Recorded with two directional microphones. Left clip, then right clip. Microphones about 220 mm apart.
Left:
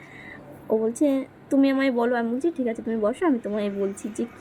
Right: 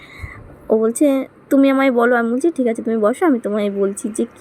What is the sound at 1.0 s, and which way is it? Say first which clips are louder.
A woman's voice: right 7 dB; 20° right (ahead or behind).